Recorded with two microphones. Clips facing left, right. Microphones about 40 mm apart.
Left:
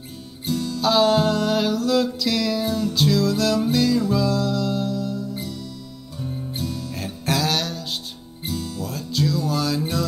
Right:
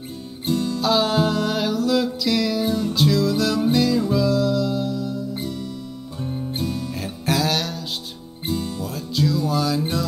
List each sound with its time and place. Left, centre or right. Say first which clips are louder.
0.5 s music: right 3 dB; right
0.7 s music: left 3 dB; centre
2.6 s music: right 1 dB; centre
2.9 s music: even; centre
5.3 s music: right 3 dB; right
6.9 s music: right 1 dB; centre
8.5 s music: right 3 dB; centre
8.8 s music: even; centre